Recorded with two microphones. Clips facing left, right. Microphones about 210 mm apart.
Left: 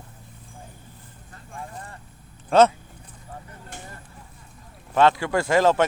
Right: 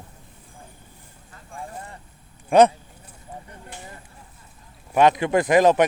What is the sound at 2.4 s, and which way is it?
Speech, 15° right (ahead or behind).